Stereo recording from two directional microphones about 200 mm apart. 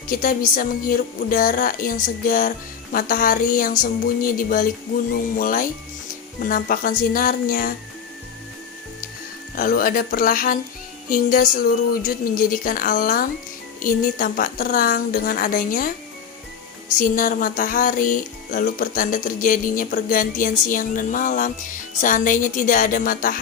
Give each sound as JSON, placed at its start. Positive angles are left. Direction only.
{"t": 0.1, "sound": "speech", "side_deg": 45}
{"t": 9.6, "sound": "speech", "side_deg": 45}
{"t": 17.0, "sound": "a woman's voice", "side_deg": 40}